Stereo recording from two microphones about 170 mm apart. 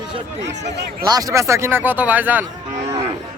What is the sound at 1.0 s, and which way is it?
Speech, 20° right (ahead or behind).